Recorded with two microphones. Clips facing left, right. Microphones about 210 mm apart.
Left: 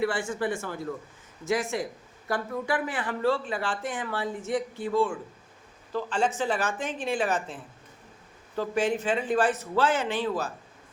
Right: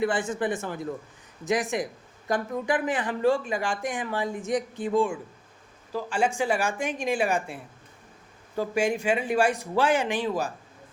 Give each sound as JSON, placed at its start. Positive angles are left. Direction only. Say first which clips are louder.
{"t": 0.0, "sound": "speech", "louder": "right 2 dB", "side_deg": -20}